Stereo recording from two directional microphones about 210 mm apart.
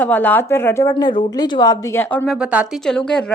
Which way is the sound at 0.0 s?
10° left (ahead or behind).